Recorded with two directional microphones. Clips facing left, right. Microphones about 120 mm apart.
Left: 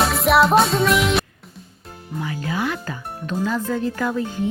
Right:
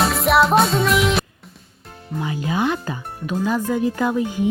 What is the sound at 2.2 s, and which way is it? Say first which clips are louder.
Music: right 3 dB; 20° right (ahead or behind).